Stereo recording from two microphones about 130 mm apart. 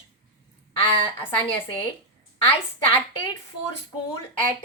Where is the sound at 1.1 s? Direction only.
15° left (ahead or behind).